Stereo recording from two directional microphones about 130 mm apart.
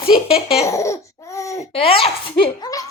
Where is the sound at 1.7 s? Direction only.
45° left (ahead or behind).